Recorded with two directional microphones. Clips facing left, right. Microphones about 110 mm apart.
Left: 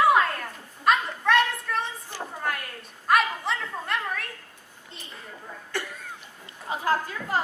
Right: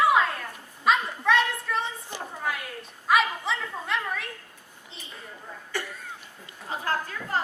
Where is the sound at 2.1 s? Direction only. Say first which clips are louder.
Left 1 dB; 20° right (ahead or behind).